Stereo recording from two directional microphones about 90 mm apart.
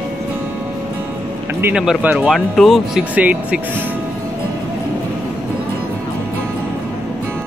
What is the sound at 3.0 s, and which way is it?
Speech, 15° right (ahead or behind).